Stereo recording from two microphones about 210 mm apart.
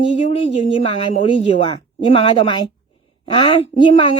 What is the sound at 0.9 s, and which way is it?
A woman's voice, 25° left (ahead or behind).